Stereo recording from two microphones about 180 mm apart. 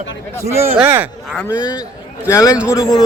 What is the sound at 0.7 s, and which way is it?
Speech, 10° right (ahead or behind).